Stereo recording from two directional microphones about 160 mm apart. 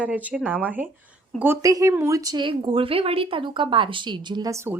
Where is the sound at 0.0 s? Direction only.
10° right (ahead or behind).